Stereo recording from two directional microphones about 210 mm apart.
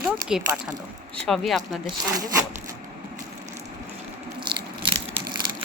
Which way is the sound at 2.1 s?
15° right (ahead or behind).